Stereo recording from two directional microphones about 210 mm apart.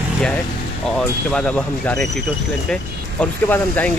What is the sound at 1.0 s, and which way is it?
Speech, 5° left (ahead or behind).